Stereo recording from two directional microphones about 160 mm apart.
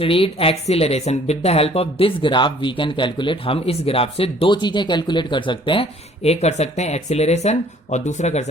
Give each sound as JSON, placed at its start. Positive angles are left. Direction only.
{"t": 0.0, "sound": "speech", "side_deg": 35}